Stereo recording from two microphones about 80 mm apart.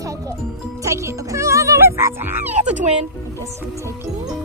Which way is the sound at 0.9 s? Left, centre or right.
Right.